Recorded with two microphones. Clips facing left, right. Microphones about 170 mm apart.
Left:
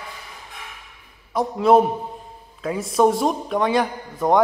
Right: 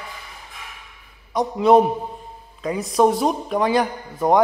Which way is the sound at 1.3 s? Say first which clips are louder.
Right 1 dB; centre (ahead or behind).